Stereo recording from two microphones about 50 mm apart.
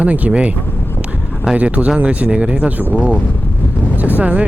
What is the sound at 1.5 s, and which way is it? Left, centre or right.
Speech, right.